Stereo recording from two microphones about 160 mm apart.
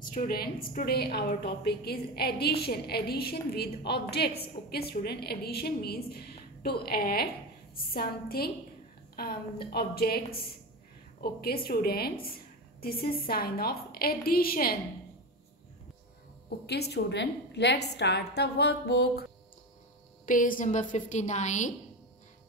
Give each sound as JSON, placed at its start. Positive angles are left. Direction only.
{"t": 0.0, "sound": "a woman's voice", "side_deg": 55}
{"t": 16.4, "sound": "a woman's voice", "side_deg": 90}
{"t": 20.2, "sound": "a woman's voice", "side_deg": 55}